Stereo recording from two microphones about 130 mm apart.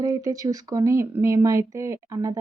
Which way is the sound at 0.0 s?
25° right (ahead or behind).